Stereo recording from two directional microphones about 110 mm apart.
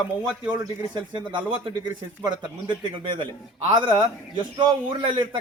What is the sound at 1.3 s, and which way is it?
A man's voice, 50° right (ahead or behind).